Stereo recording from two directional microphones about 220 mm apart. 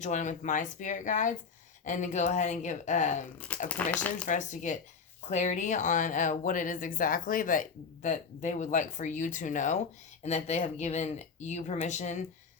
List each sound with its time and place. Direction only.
0.0 s speech: 35° left (ahead or behind)
3.5 s speech: 5° left (ahead or behind)
4.3 s speech: 35° left (ahead or behind)